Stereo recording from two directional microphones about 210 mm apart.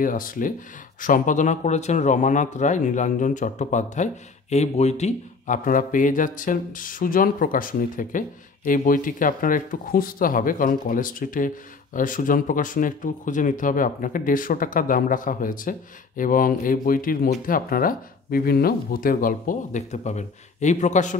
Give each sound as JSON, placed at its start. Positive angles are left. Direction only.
{"t": 0.0, "sound": "a man's voice", "side_deg": 40}